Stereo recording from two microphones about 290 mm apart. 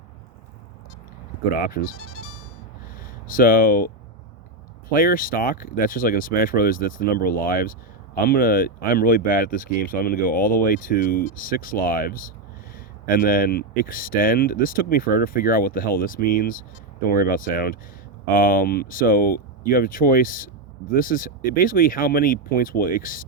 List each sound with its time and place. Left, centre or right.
1.5 s speech: left
2.0 s music: left
3.0 s speech: left
4.9 s speech: left